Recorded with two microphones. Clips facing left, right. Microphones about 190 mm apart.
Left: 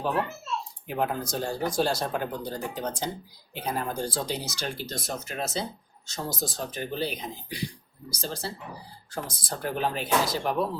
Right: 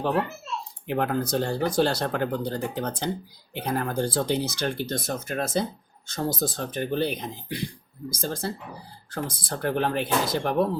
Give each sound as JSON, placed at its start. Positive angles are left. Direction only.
{"t": 0.9, "sound": "speech", "side_deg": -65}